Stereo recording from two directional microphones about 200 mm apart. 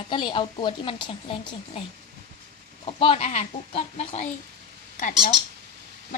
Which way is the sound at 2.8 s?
30° left (ahead or behind).